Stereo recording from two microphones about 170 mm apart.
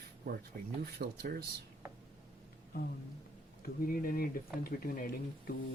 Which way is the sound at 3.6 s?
60° left (ahead or behind).